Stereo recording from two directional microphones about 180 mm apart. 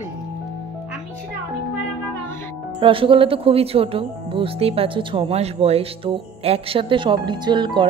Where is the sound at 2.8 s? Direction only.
30° right (ahead or behind).